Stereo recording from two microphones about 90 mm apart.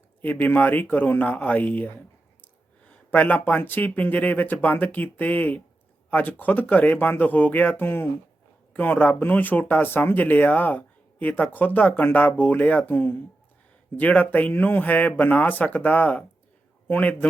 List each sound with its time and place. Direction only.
0.2 s speech: 20° left (ahead or behind)
3.1 s speech: 20° left (ahead or behind)